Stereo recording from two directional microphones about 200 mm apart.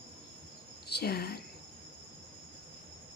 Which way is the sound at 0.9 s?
50° left (ahead or behind).